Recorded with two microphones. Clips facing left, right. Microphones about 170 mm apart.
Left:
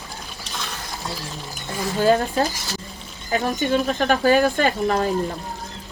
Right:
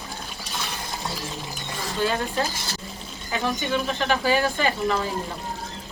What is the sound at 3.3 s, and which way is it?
Speech, 45° left (ahead or behind).